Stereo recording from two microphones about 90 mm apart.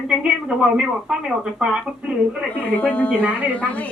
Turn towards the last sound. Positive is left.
turn(degrees=15)  # may be behind; listen again after turning